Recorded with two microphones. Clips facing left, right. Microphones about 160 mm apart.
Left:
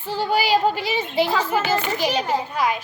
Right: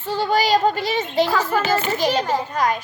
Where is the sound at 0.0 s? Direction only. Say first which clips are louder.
Right 2 dB; 10° left (ahead or behind).